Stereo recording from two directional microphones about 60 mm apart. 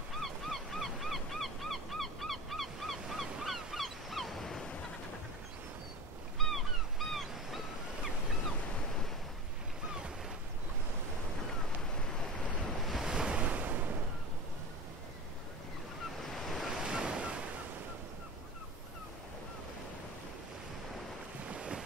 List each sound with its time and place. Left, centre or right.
0.2 s honk: centre
3.4 s waves: centre
6.3 s a sound: centre
9.8 s ocean: centre
13.0 s waves: centre; by 13.9 s right
16.3 s waves: centre
16.7 s waves: centre
21.5 s boat: centre